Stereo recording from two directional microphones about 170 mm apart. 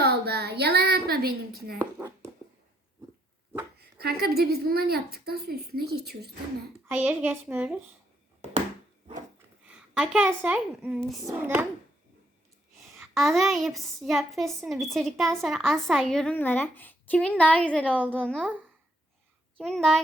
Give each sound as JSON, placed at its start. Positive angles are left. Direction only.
{"t": 0.0, "sound": "a sound", "side_deg": -70}
{"t": 1.8, "sound": "speech", "side_deg": -15}
{"t": 3.8, "sound": "a woman's voice", "side_deg": -70}
{"t": 6.8, "sound": "a woman's voice", "side_deg": -10}
{"t": 9.6, "sound": "a woman's voice", "side_deg": -5}
{"t": 11.3, "sound": "a woman's voice", "side_deg": -15}
{"t": 13.0, "sound": "a woman's voice", "side_deg": 0}
{"t": 19.6, "sound": "a woman's voice", "side_deg": 5}